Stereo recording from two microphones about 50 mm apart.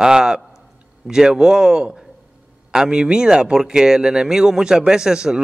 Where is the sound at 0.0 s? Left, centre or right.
Centre.